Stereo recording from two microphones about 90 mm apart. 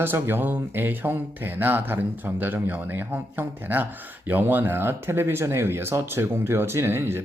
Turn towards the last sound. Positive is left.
turn(degrees=-25)  # may be behind; listen again after turning